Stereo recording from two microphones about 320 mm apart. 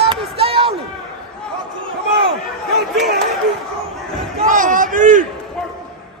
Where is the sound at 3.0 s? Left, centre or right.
Right.